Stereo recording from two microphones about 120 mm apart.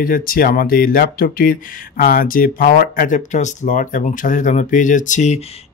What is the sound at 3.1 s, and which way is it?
Speech, 90° left.